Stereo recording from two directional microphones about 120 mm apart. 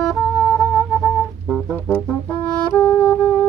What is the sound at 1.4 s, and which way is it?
Organ, 5° left (ahead or behind).